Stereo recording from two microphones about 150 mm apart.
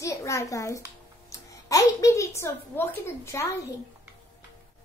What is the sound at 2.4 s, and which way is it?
A woman's voice, 15° left (ahead or behind).